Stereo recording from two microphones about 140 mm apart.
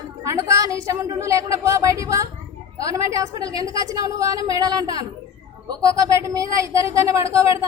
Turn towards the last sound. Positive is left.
turn(degrees=-20)  # may be behind; listen again after turning